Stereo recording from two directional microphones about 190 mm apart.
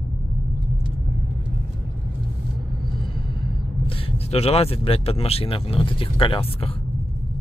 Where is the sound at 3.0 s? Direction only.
25° left (ahead or behind).